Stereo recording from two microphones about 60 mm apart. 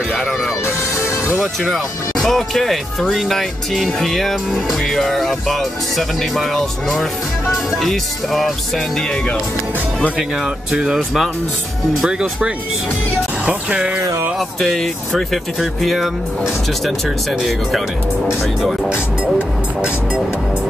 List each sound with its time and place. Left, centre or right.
0.1 s music: centre
0.7 s music: left
1.6 s speech: centre
10.1 s speech: centre
14.6 s speech: centre
17.4 s speech: centre
18.9 s speech: centre